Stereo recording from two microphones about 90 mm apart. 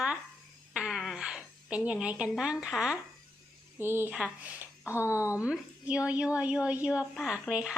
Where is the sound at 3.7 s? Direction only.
25° right (ahead or behind).